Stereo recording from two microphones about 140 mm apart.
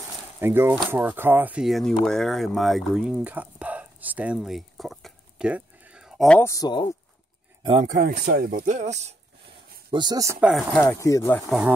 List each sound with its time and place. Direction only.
0.4 s speech: 15° right (ahead or behind)
6.3 s speech: 20° left (ahead or behind)
7.8 s speech: 85° right; by 9.1 s 55° right (ahead or behind)
9.8 s speech: 30° right (ahead or behind)
10.4 s speech: centre (ahead or behind)
10.9 s speech: 20° left (ahead or behind)